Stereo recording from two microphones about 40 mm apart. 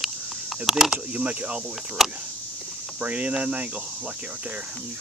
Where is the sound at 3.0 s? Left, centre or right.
Right.